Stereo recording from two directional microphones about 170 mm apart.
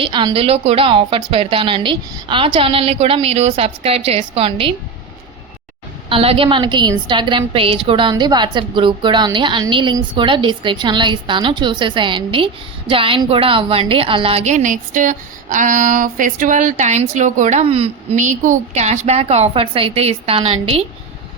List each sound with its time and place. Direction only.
0.0 s a woman's voice: 30° right (ahead or behind)
6.1 s a woman's voice: 35° right (ahead or behind)